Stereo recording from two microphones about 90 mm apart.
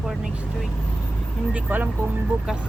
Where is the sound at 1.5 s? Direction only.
20° right (ahead or behind).